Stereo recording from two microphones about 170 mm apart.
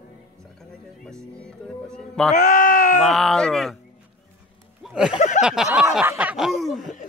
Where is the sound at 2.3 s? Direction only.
45° left (ahead or behind).